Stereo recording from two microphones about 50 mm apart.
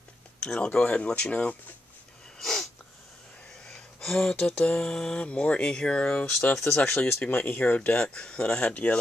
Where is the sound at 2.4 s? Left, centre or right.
Centre.